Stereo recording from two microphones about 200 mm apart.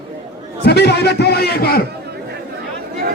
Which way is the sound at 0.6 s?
55° left (ahead or behind).